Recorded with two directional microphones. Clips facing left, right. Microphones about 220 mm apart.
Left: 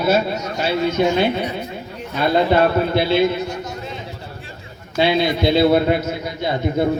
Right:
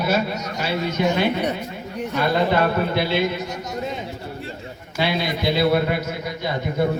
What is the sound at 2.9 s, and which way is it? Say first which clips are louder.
Speech: left 5 dB; 30° left (ahead or behind).